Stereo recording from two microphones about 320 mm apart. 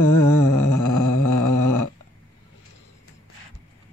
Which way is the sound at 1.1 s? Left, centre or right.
Left.